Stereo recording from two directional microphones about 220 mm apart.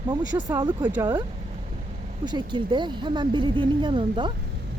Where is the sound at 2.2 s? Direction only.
20° right (ahead or behind).